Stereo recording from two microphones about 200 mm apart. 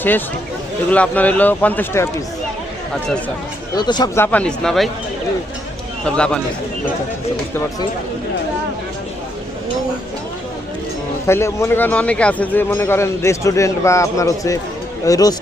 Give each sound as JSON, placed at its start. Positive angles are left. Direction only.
{"t": 0.9, "sound": "speech", "side_deg": 5}
{"t": 3.8, "sound": "speech", "side_deg": 20}
{"t": 6.1, "sound": "speech", "side_deg": 5}
{"t": 11.3, "sound": "speech", "side_deg": 15}